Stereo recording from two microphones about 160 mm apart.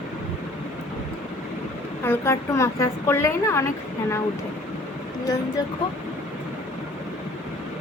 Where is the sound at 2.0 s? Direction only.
15° left (ahead or behind).